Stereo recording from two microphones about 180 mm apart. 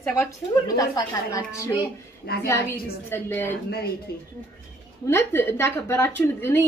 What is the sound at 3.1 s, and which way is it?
Speech, 10° left (ahead or behind).